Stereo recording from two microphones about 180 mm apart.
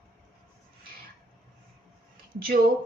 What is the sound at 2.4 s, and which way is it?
Speech, 55° right (ahead or behind).